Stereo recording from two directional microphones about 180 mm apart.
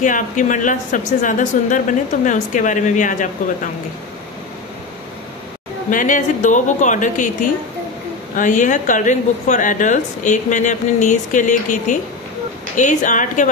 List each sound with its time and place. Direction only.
0.0 s speech: 45° left (ahead or behind)
5.9 s speech: 45° left (ahead or behind)
8.4 s speech: 45° left (ahead or behind)